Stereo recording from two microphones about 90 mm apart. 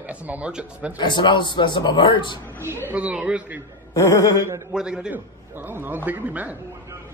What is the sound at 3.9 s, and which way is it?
Speech, 35° left (ahead or behind).